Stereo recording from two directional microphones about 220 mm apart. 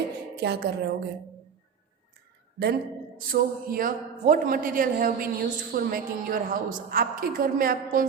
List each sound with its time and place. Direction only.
0.3 s a woman's voice: 50° right (ahead or behind)
3.2 s a woman's voice: 40° right (ahead or behind)